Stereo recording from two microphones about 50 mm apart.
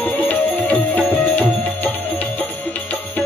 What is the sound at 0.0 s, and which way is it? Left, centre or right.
Music, left.